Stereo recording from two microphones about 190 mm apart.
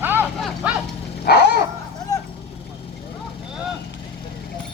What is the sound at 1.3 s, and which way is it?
Bow-wow, 55° left (ahead or behind).